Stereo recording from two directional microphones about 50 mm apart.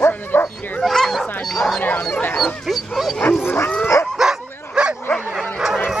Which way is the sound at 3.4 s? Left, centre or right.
Left.